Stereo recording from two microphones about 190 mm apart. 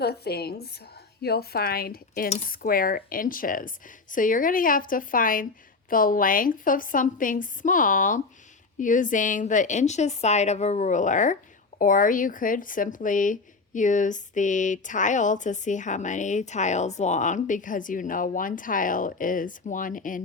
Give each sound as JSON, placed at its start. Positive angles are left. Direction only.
{"t": 0.0, "sound": "cutlery", "side_deg": 55}
{"t": 2.5, "sound": "a woman's voice", "side_deg": 50}